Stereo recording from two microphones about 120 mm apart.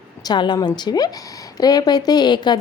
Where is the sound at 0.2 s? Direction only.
35° left (ahead or behind).